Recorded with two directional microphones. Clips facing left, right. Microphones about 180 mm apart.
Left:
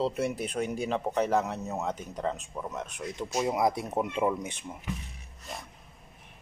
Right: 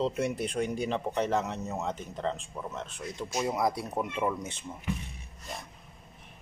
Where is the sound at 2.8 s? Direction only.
15° left (ahead or behind).